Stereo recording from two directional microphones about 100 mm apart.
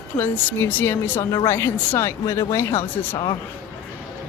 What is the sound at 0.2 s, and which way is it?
Speech, 20° left (ahead or behind).